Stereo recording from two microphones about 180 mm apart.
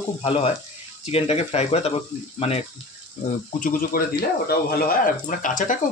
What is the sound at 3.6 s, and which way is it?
Speech, 50° left (ahead or behind).